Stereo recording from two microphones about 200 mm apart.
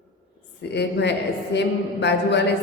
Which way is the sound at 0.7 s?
60° left (ahead or behind).